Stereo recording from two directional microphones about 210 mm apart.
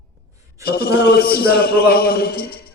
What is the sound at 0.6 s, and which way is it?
A man's voice, 45° left (ahead or behind).